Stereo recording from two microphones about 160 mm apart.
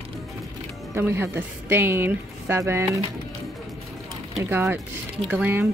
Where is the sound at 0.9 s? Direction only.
15° right (ahead or behind).